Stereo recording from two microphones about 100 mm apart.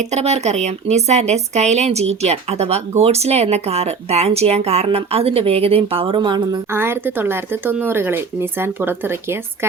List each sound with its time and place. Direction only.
0.2 s speech: 90° right; by 6.6 s 50° right (ahead or behind)
6.7 s speech: 25° right (ahead or behind)